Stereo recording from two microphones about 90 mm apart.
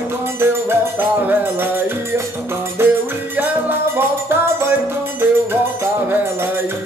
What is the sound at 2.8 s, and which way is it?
Music, 25° right (ahead or behind).